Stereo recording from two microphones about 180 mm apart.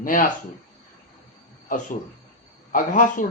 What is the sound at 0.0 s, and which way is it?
Speech, 50° left (ahead or behind).